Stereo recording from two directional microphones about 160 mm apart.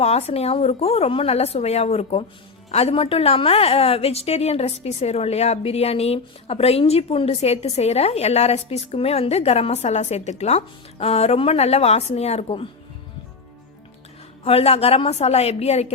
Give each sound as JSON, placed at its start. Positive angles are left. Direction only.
{"t": 0.0, "sound": "a woman's voice", "side_deg": 40}
{"t": 14.4, "sound": "a woman's voice", "side_deg": 40}